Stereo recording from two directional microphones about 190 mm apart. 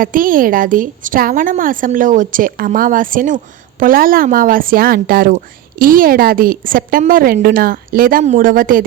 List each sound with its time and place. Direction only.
0.0 s a woman's voice: 45° right (ahead or behind)